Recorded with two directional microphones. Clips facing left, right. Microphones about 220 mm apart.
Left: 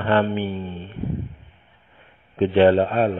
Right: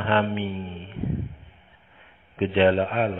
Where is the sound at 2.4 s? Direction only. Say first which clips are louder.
Left 4 dB; 45° left (ahead or behind).